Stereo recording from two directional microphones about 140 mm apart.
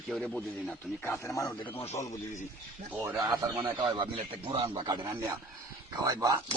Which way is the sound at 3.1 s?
30° right (ahead or behind).